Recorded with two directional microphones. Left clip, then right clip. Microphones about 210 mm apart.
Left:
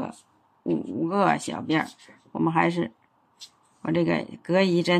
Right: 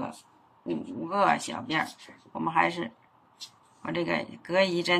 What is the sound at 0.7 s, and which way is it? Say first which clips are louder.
Speech: left 6 dB; 30° left (ahead or behind).